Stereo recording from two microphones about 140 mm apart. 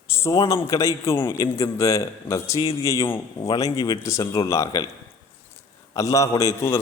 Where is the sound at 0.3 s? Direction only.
25° left (ahead or behind).